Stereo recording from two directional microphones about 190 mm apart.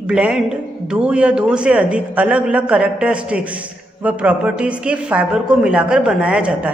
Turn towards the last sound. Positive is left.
turn(degrees=-5)  # may be behind; listen again after turning